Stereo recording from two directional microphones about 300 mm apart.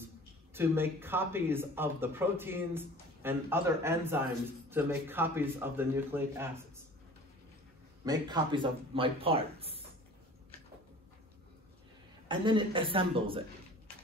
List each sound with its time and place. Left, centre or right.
0.6 s speech: centre
8.0 s speech: centre
12.3 s speech: centre